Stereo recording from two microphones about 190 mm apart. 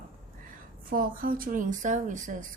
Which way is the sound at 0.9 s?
45° right (ahead or behind).